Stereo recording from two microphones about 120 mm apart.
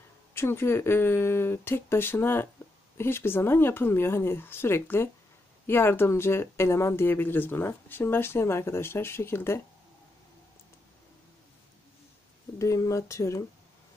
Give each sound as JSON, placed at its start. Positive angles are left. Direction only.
{"t": 0.3, "sound": "speech", "side_deg": 20}
{"t": 12.5, "sound": "speech", "side_deg": 25}